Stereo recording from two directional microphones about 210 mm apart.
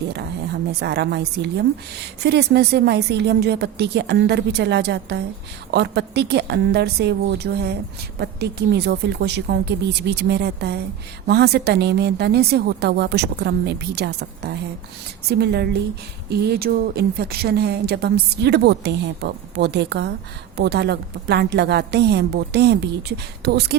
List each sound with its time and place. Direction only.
0.7 s a woman's voice: 50° right (ahead or behind)